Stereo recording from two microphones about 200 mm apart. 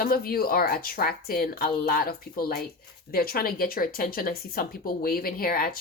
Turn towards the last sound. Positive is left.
turn(degrees=45)  # may be behind; listen again after turning